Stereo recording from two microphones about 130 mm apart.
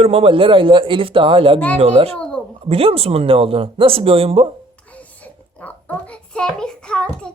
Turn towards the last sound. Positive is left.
turn(degrees=5)  # may be behind; listen again after turning